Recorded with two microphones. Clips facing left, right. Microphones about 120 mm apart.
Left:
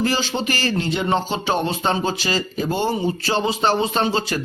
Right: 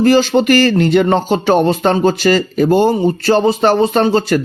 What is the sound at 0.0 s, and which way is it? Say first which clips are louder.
Speech: right 11 dB; 55° right (ahead or behind).